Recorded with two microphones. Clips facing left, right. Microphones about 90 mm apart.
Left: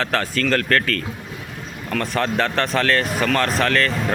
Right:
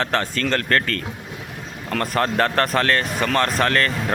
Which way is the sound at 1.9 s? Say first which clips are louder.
Right 1 dB; 40° right (ahead or behind).